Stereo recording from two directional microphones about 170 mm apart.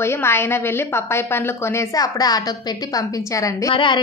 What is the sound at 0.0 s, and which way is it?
A woman's voice, 15° left (ahead or behind).